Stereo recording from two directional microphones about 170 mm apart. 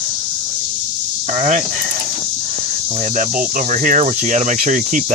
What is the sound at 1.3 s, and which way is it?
Speech, 45° right (ahead or behind).